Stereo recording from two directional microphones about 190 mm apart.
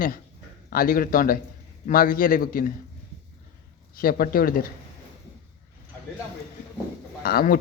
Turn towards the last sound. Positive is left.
turn(degrees=50)  # may be behind; listen again after turning